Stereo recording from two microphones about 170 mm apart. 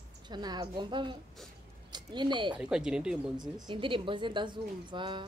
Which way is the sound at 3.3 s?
25° right (ahead or behind).